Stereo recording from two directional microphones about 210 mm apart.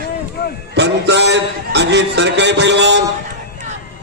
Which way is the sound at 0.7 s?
55° right (ahead or behind).